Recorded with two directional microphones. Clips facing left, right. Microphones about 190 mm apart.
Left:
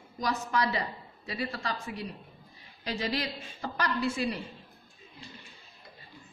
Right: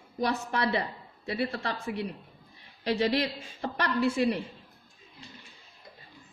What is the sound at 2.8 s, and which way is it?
A woman's voice, 60° right (ahead or behind).